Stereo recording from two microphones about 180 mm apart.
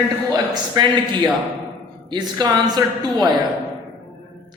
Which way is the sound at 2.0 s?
25° right (ahead or behind).